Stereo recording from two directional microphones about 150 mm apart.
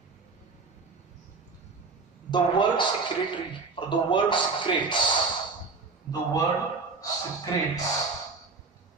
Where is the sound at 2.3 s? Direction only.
30° left (ahead or behind).